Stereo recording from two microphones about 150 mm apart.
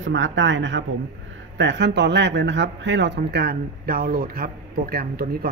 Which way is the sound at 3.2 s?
90° right.